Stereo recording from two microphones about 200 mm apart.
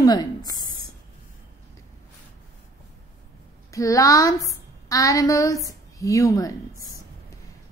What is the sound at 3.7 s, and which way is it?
A woman's voice, 15° left (ahead or behind).